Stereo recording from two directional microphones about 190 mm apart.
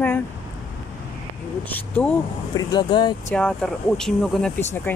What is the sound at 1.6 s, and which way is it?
Speech, 10° left (ahead or behind).